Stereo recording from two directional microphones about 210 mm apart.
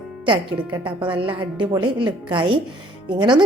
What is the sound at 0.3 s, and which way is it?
A woman's voice, 20° right (ahead or behind).